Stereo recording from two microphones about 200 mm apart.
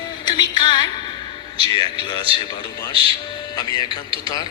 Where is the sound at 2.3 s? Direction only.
25° right (ahead or behind).